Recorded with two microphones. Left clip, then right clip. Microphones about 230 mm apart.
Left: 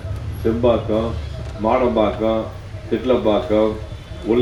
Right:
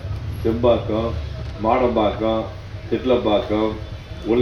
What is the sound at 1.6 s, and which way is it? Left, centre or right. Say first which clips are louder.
A man's voice: left 1 dB; left.